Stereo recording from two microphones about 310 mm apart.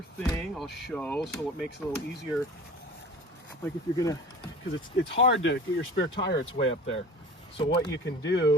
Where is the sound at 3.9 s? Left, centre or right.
Centre.